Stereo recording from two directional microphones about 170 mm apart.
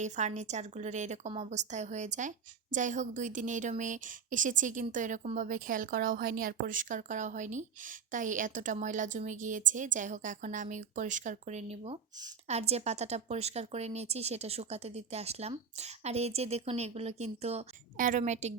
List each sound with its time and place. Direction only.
0.0 s a woman's voice: 45° right (ahead or behind)
18.0 s a woman's voice: 50° right (ahead or behind)